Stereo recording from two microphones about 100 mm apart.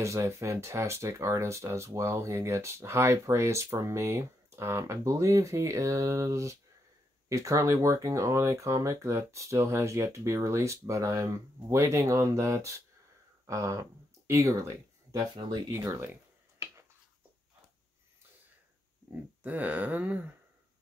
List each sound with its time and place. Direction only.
0.0 s speech: 30° right (ahead or behind)
15.3 s speech: 50° right (ahead or behind)
15.7 s speech: 25° right (ahead or behind)
19.4 s a sound: 15° right (ahead or behind)